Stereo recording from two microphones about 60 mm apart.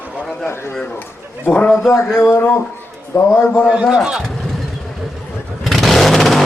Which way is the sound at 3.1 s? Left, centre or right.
Left.